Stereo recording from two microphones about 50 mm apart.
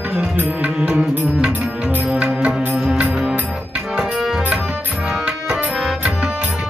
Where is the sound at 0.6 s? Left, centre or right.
Right.